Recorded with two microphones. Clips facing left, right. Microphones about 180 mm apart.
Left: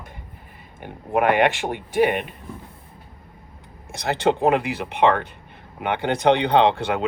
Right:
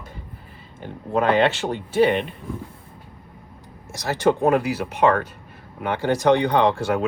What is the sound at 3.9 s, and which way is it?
Speech, 60° left (ahead or behind).